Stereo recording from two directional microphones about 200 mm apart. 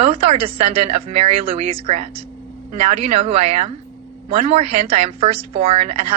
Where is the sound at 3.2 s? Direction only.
30° right (ahead or behind).